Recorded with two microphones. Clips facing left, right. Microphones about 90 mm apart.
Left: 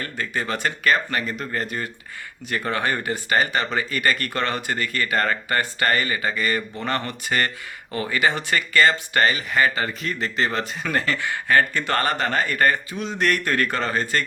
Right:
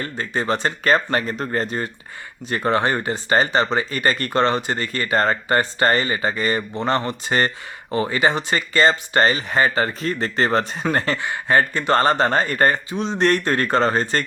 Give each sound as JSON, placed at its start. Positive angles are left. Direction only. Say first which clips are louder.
{"t": 0.0, "sound": "speech", "louder": "right 3 dB", "side_deg": -30}
{"t": 11.2, "sound": "speech", "louder": "right 1 dB", "side_deg": -20}